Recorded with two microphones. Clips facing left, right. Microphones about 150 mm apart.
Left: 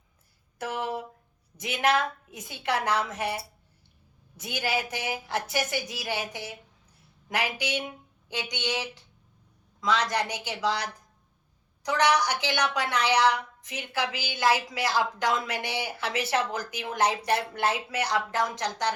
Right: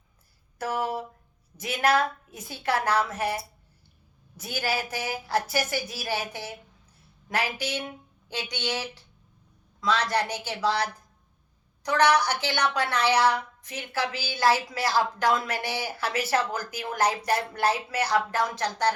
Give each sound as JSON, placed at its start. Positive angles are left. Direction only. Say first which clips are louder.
{"t": 1.5, "sound": "a woman's voice", "louder": "right 2 dB", "side_deg": 20}
{"t": 4.4, "sound": "a woman's voice", "louder": "even", "side_deg": 20}